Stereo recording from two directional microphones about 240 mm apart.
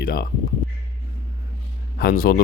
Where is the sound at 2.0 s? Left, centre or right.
Left.